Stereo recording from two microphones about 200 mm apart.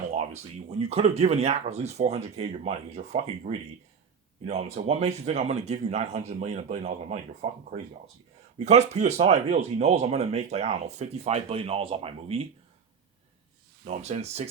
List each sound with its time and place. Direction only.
0.7 s speech: 30° right (ahead or behind)
13.8 s speech: 35° right (ahead or behind)